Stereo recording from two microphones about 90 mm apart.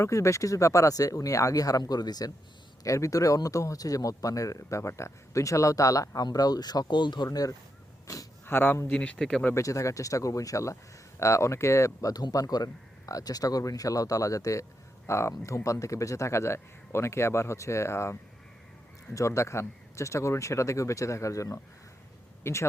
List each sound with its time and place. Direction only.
0.0 s speech: 35° left (ahead or behind); by 7.3 s 60° left (ahead or behind)
7.3 s speech: 40° left (ahead or behind)
8.0 s a sound: 40° left (ahead or behind)
8.4 s speech: 25° left (ahead or behind)
8.9 s speech: 15° left (ahead or behind)
9.6 s speech: 35° left (ahead or behind)
12.1 s speech: 45° left (ahead or behind)
22.5 s speech: 25° left (ahead or behind)